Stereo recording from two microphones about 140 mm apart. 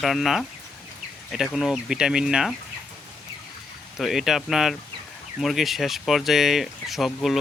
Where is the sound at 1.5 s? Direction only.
Centre (ahead or behind).